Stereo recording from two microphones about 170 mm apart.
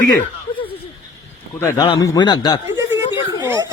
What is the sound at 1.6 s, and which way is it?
Speech, 25° left (ahead or behind).